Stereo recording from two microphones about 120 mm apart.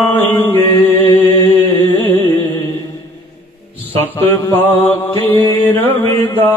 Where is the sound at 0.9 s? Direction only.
15° left (ahead or behind).